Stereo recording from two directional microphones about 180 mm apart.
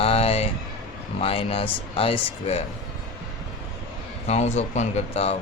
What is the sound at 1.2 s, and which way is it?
A man's voice, 30° left (ahead or behind).